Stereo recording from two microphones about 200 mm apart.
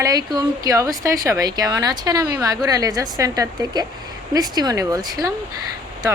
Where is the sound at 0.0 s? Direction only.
20° right (ahead or behind).